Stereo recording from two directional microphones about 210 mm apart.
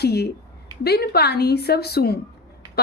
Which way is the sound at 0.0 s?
50° left (ahead or behind).